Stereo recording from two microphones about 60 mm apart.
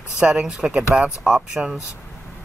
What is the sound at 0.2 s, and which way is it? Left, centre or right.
Speech, centre.